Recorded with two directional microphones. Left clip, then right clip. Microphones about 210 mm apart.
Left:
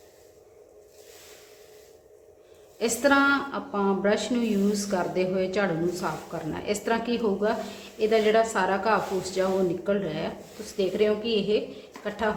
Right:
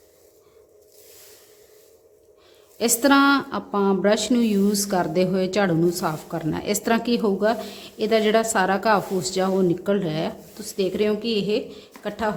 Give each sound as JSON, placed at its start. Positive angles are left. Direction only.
{"t": 2.7, "sound": "a woman's voice", "side_deg": -55}